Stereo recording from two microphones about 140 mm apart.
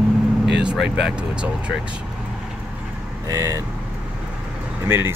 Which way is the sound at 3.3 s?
20° right (ahead or behind).